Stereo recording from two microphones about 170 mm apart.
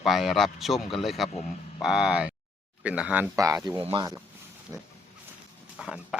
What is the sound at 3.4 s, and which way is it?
Speech, 20° right (ahead or behind).